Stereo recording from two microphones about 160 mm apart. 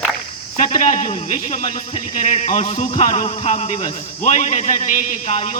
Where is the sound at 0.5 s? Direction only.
50° left (ahead or behind).